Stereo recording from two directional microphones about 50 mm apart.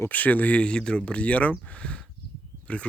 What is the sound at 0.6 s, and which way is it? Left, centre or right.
Speech, centre.